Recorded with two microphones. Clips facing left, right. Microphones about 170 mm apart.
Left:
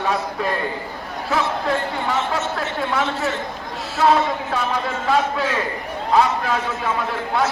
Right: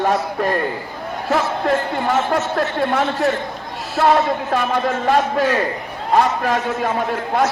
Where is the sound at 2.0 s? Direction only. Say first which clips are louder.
Right 4 dB; 45° right (ahead or behind).